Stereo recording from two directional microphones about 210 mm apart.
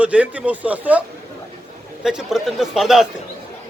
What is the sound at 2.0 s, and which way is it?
A man's voice, 5° right (ahead or behind).